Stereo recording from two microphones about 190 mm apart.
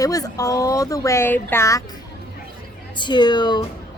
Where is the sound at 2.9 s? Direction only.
25° left (ahead or behind).